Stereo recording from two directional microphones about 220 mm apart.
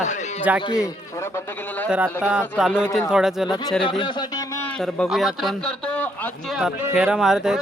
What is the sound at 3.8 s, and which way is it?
Speech, 20° left (ahead or behind).